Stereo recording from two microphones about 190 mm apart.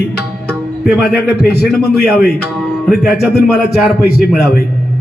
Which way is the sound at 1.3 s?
55° left (ahead or behind).